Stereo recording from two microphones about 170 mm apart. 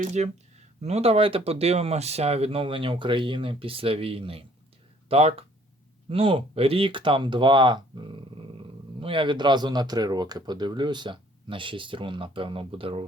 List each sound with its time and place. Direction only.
0.0 s speech: 45° right (ahead or behind)